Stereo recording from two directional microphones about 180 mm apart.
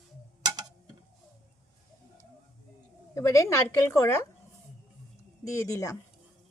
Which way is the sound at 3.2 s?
15° left (ahead or behind).